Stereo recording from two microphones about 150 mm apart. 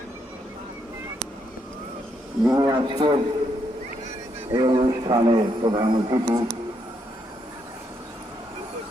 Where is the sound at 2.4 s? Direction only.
25° right (ahead or behind).